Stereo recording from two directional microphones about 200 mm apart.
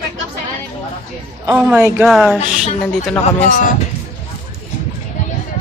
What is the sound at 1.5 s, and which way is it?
A woman's voice, 5° right (ahead or behind).